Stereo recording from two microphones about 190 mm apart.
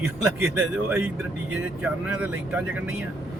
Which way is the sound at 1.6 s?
5° right (ahead or behind).